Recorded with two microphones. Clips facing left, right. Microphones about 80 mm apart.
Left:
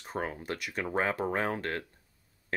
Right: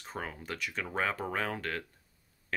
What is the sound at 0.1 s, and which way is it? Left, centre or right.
Speech, left.